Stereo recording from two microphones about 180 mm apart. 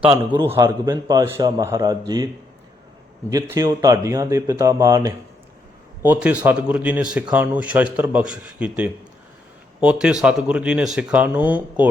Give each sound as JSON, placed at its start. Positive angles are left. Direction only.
{"t": 0.5, "sound": "a man's voice", "side_deg": -15}